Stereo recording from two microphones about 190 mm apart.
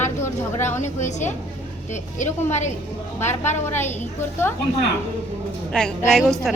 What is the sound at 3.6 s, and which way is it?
Speech, 10° left (ahead or behind).